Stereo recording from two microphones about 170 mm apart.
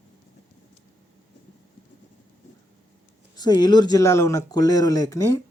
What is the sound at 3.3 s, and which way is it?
Speech, 25° left (ahead or behind).